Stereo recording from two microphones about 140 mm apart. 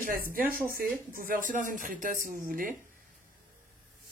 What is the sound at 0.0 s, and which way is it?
Speech, 90° right.